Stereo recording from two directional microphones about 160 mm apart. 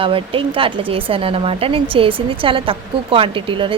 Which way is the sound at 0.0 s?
35° right (ahead or behind).